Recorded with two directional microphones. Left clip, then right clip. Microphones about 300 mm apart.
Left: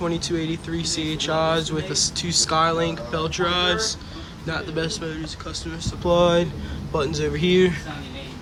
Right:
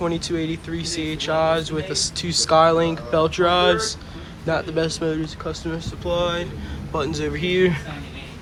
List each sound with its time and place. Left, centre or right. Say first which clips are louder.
0.0 s speech: right 1 dB; centre
6.0 s speech: left 5 dB; centre